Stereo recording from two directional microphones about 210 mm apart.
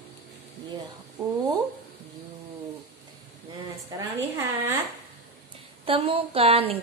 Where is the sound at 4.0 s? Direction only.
10° right (ahead or behind).